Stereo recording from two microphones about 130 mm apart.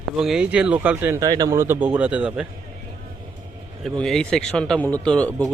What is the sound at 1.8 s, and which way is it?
Speech, 10° right (ahead or behind).